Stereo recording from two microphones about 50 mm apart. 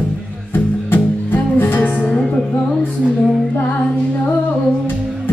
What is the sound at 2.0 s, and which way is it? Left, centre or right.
Music, left.